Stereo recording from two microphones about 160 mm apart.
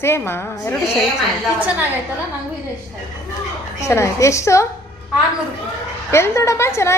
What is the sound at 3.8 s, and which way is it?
Speech, 15° left (ahead or behind).